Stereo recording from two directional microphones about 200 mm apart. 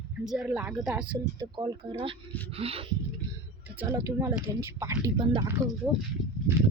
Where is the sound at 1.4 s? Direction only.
20° right (ahead or behind).